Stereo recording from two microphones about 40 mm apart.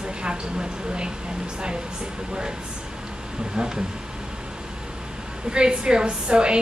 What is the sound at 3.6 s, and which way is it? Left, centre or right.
Speech, centre.